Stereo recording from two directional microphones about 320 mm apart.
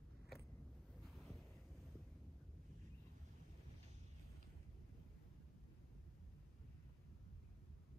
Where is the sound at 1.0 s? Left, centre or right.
Centre.